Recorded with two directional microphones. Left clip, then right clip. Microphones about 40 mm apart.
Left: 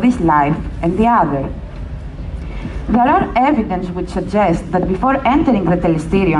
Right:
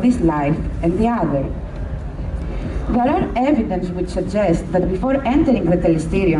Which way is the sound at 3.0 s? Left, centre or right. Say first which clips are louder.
Left 6 dB; centre.